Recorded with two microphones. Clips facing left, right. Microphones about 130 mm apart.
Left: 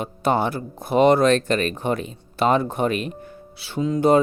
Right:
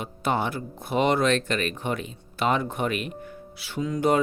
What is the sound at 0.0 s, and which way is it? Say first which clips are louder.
Speech: left 5 dB; 40° left (ahead or behind).